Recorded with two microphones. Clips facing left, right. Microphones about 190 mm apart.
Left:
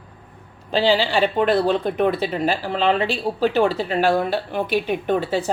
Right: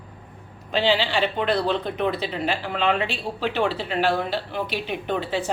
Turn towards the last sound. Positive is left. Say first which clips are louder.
# left 5 dB
turn(degrees=45)  # may be behind; listen again after turning